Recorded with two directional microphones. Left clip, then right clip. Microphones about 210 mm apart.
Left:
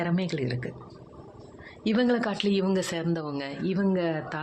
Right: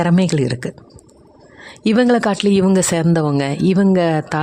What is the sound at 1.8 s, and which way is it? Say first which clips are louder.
Speech: right 11 dB; 60° right (ahead or behind).